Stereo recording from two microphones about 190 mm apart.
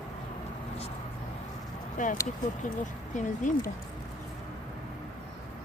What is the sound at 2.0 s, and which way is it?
Speech, 40° left (ahead or behind).